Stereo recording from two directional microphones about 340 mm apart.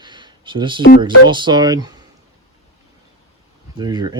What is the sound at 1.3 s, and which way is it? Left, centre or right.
Speech, centre.